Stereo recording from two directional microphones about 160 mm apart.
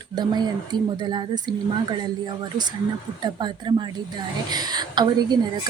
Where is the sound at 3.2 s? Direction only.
30° right (ahead or behind).